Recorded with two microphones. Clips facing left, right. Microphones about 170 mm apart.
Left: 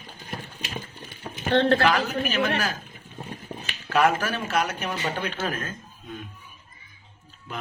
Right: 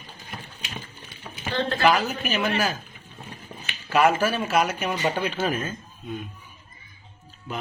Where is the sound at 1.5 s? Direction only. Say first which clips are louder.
Left 7 dB; 65° left (ahead or behind).